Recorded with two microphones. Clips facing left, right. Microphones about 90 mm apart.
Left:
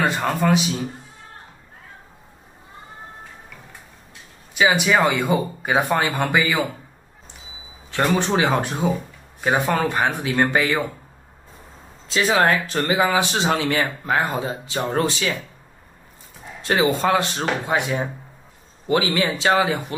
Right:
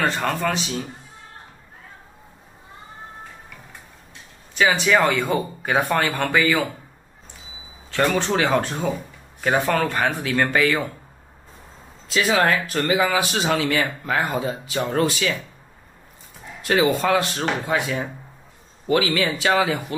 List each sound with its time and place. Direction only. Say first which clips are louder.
0.0 s speech: left 2 dB; 10° left (ahead or behind)
4.6 s speech: even; 10° left (ahead or behind)
8.2 s speech: even; 20° left (ahead or behind)
12.1 s speech: left 1 dB; 30° left (ahead or behind)
16.6 s speech: even; 30° left (ahead or behind)